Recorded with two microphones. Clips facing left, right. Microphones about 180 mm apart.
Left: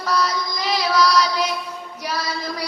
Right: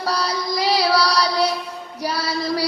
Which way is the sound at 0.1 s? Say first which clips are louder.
Left 1 dB; 35° right (ahead or behind).